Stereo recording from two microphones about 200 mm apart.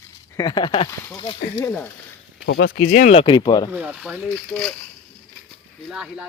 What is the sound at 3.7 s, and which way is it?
Speech, 5° right (ahead or behind).